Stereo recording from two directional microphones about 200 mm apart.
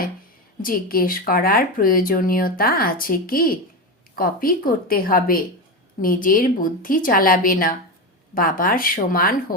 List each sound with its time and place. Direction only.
0.6 s speech: 45° left (ahead or behind)